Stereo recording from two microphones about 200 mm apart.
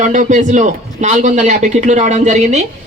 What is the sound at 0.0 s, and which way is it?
A man's voice, 40° right (ahead or behind).